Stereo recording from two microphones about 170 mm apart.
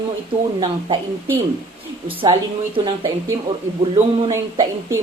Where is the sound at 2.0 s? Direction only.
30° right (ahead or behind).